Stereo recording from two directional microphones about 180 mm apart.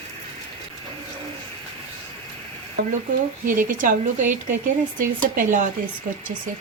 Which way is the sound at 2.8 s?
55° right (ahead or behind).